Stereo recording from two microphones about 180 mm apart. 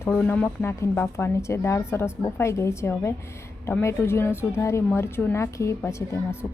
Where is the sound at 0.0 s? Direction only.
10° left (ahead or behind).